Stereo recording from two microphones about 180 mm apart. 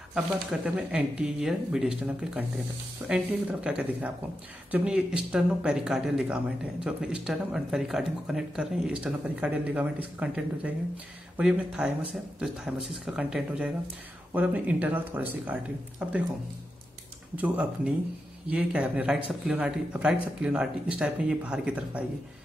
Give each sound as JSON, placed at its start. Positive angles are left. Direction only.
{"t": 0.1, "sound": "speech", "side_deg": -5}
{"t": 17.4, "sound": "speech", "side_deg": -5}